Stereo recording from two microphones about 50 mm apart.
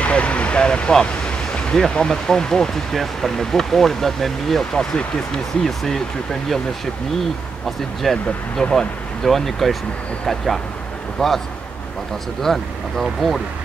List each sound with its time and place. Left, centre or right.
0.0 s speech: left; by 6.0 s centre
7.6 s speech: centre